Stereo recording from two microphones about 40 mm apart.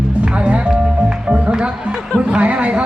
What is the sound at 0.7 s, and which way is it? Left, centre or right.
Music, centre.